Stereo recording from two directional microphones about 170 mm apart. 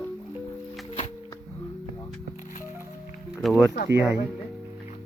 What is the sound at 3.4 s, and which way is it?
Speech, centre (ahead or behind).